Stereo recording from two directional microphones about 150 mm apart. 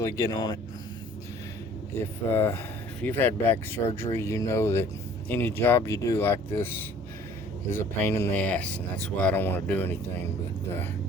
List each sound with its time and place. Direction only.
0.0 s speech: 25° left (ahead or behind)
2.3 s speech: 15° left (ahead or behind)